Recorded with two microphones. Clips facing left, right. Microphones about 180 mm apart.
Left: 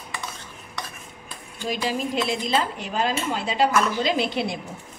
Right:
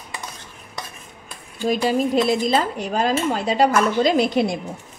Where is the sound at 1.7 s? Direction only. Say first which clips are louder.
Right 7 dB; 45° right (ahead or behind).